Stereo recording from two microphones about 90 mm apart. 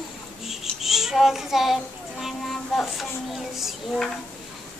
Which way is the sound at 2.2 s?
Centre (ahead or behind).